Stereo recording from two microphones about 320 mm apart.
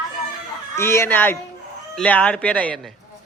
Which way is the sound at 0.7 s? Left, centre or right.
Centre.